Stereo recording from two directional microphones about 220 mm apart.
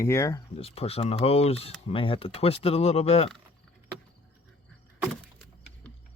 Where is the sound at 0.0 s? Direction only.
10° left (ahead or behind).